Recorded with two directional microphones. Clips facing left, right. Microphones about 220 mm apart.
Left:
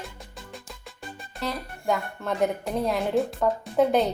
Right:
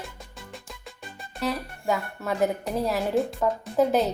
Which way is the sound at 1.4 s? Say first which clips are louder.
Right 3 dB; 5° right (ahead or behind).